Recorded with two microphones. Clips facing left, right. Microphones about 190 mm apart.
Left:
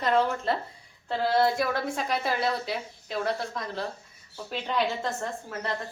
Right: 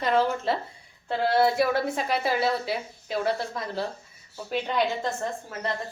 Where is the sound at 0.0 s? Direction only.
Centre (ahead or behind).